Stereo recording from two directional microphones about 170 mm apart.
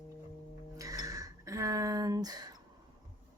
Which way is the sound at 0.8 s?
20° right (ahead or behind).